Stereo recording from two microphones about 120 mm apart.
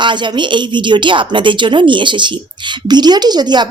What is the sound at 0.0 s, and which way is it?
A woman's voice, 40° right (ahead or behind).